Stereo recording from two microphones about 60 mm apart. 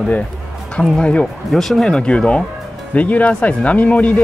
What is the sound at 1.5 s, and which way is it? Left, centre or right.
Speech, centre.